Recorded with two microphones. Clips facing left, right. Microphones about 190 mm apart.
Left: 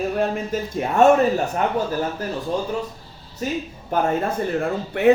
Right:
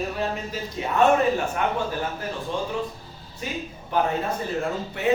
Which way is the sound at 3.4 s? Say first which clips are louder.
Left 6 dB; 40° left (ahead or behind).